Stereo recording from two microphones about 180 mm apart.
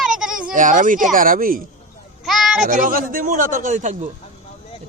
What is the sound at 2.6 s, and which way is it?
A man's voice, 45° right (ahead or behind).